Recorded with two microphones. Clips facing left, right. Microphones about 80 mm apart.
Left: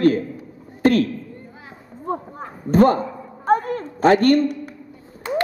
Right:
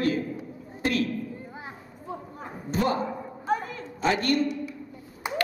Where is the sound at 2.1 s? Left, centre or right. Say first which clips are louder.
Left 11 dB; left.